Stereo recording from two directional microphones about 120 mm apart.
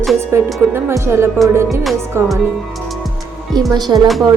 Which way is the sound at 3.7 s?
35° right (ahead or behind).